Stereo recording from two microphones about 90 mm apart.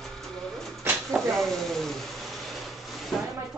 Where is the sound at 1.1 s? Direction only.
5° left (ahead or behind).